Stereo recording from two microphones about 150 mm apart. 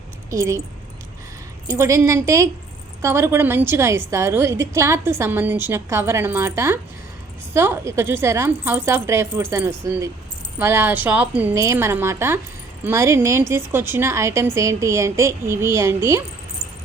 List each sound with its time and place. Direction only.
0.3 s a woman's voice: 20° right (ahead or behind)
1.7 s a woman's voice: 20° right (ahead or behind)